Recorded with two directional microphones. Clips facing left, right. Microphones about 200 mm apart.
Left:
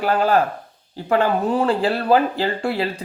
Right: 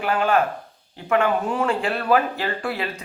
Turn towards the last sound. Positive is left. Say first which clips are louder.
# left 5 dB
turn(degrees=30)  # may be behind; listen again after turning